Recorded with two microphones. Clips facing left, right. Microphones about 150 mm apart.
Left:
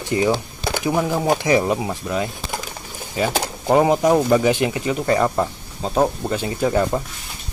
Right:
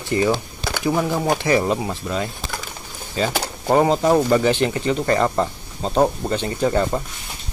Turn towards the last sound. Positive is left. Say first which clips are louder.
# even
turn(degrees=5)  # may be behind; listen again after turning